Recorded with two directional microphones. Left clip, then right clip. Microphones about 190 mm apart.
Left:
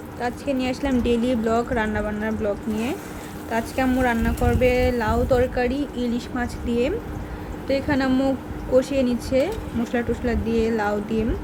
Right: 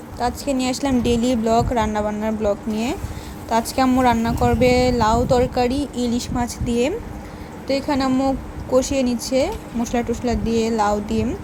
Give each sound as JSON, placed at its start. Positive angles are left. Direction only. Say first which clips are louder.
{"t": 0.2, "sound": "a woman's voice", "louder": "right 3 dB", "side_deg": -15}